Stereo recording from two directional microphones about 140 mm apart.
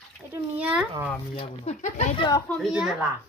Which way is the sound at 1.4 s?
50° left (ahead or behind).